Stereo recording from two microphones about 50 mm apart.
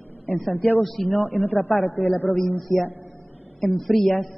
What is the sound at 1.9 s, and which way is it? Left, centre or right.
Speech, left.